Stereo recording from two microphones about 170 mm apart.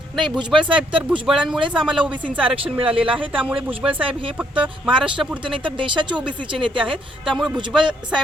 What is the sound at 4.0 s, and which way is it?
Speech, 30° right (ahead or behind).